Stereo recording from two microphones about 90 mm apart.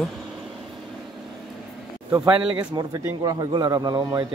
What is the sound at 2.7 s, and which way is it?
Speech, 45° right (ahead or behind).